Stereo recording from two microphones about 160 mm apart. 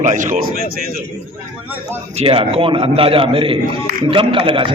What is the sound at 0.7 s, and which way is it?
Speech, 65° right (ahead or behind).